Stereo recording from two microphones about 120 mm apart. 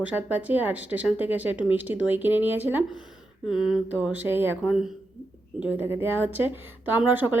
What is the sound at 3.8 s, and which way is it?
Speech, 10° right (ahead or behind).